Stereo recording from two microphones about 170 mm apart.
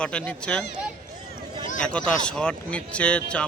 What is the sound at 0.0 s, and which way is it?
Speech, 5° left (ahead or behind).